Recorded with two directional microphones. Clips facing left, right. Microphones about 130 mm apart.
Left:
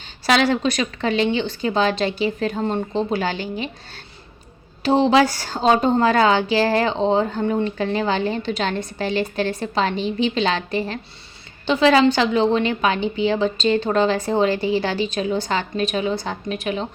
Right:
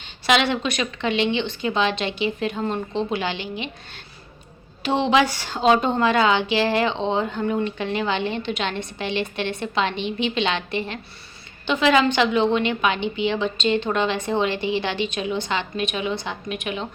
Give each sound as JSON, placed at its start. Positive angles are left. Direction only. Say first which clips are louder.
{"t": 0.3, "sound": "a woman's voice", "louder": "left 3 dB", "side_deg": 40}
{"t": 4.8, "sound": "a woman's voice", "louder": "left 4 dB", "side_deg": 35}